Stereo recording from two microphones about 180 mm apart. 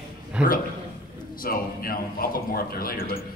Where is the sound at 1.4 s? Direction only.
55° left (ahead or behind).